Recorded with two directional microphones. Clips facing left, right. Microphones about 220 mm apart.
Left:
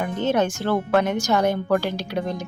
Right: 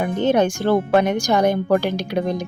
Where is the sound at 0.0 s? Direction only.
15° right (ahead or behind).